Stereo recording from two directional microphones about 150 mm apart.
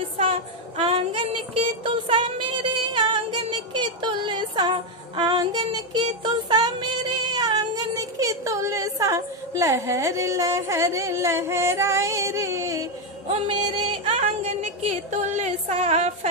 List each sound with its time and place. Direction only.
0.2 s child singing: 35° right (ahead or behind); by 12.8 s 20° right (ahead or behind)
14.0 s a woman's voice: 45° right (ahead or behind)